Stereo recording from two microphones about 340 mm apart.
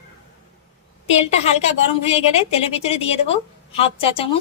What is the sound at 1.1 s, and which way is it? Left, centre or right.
A woman's voice, centre.